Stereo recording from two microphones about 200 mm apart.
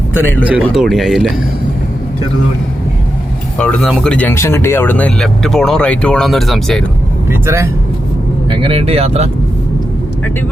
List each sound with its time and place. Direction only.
0.2 s speech: 10° left (ahead or behind)
0.6 s speech: centre (ahead or behind)
3.6 s speech: 5° left (ahead or behind)
7.3 s speech: 15° right (ahead or behind)
8.4 s speech: 25° right (ahead or behind)